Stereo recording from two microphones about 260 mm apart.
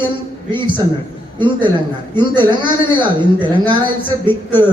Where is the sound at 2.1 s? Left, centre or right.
Centre.